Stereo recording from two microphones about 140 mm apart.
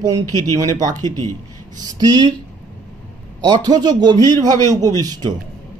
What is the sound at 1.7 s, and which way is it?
Speech, 25° right (ahead or behind).